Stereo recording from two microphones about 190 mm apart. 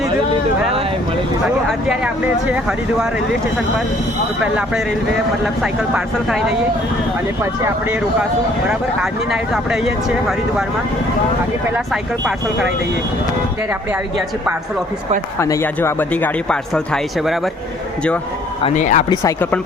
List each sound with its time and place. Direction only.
1.9 s speech: 5° right (ahead or behind)
8.6 s speech: 5° right (ahead or behind)
15.4 s speech: 15° left (ahead or behind)
18.6 s speech: 40° left (ahead or behind)
19.1 s speech: 15° left (ahead or behind)